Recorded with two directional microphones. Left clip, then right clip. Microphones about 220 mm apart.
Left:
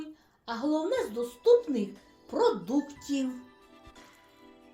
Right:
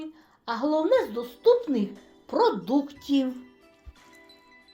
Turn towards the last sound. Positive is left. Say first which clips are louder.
# right 6 dB
turn(degrees=-25)  # may be behind; listen again after turning